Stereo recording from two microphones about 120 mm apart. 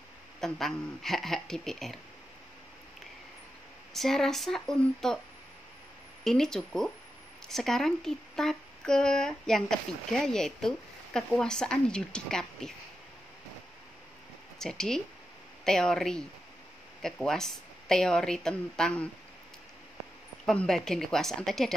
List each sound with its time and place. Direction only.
0.4 s speech: centre (ahead or behind)
3.9 s speech: 5° left (ahead or behind)
6.2 s speech: 5° left (ahead or behind)
14.6 s speech: 5° left (ahead or behind)
20.4 s speech: 5° left (ahead or behind)